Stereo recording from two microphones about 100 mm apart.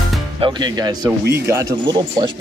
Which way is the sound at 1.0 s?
30° right (ahead or behind).